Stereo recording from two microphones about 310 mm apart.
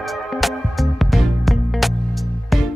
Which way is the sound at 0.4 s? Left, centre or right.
Centre.